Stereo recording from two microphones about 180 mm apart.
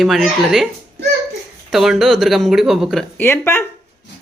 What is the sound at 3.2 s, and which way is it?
Speech, 15° left (ahead or behind).